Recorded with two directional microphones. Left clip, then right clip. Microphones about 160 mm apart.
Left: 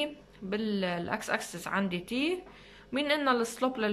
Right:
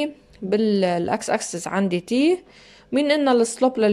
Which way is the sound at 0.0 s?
40° right (ahead or behind).